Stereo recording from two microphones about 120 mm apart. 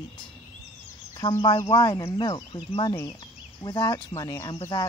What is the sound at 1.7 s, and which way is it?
Speech, 35° left (ahead or behind).